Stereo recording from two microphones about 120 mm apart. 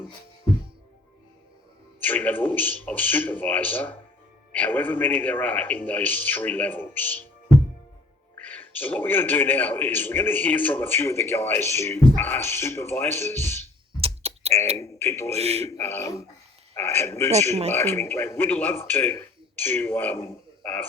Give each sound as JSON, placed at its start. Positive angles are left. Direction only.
{"t": 2.0, "sound": "a man's voice", "side_deg": 15}
{"t": 8.4, "sound": "a man's voice", "side_deg": 15}
{"t": 14.0, "sound": "computer keyboard", "side_deg": -60}
{"t": 14.8, "sound": "speech", "side_deg": 20}
{"t": 15.4, "sound": "a man's voice", "side_deg": -60}
{"t": 15.8, "sound": "a man's voice", "side_deg": 20}